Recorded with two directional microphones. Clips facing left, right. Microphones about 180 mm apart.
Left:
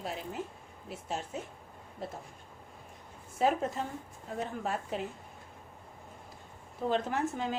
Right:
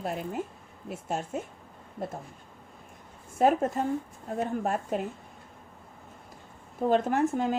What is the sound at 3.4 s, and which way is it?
Speech, 50° right (ahead or behind).